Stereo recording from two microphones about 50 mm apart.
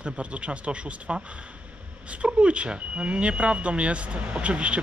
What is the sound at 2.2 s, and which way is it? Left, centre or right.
Speech, right.